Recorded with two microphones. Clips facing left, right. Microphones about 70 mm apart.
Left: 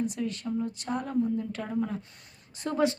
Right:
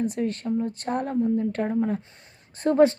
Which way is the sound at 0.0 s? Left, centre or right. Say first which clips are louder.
Right 5 dB; right.